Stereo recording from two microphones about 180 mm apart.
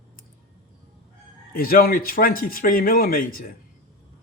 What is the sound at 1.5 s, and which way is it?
A man's voice, 55° left (ahead or behind).